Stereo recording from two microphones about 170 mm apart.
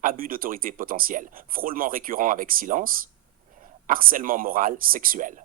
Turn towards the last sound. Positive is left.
turn(degrees=-50)  # may be behind; listen again after turning